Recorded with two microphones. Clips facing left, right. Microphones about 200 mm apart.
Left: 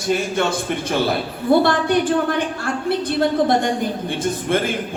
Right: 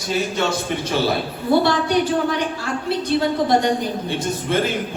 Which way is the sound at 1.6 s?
55° left (ahead or behind).